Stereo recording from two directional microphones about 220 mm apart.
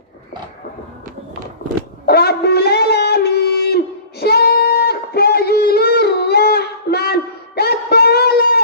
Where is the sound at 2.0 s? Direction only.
45° left (ahead or behind).